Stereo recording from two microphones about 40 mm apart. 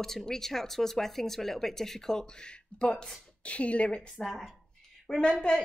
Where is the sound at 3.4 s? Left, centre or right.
Left.